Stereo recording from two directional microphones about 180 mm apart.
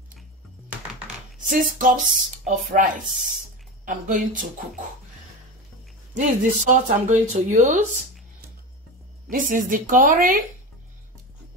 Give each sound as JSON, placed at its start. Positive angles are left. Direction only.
{"t": 1.5, "sound": "speech", "side_deg": -50}
{"t": 6.1, "sound": "speech", "side_deg": -45}
{"t": 9.3, "sound": "speech", "side_deg": -50}